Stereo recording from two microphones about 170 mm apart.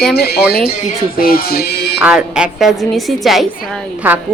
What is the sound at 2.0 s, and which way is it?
A woman's voice, 5° right (ahead or behind).